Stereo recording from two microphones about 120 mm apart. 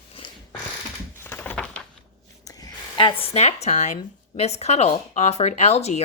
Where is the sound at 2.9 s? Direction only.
50° left (ahead or behind).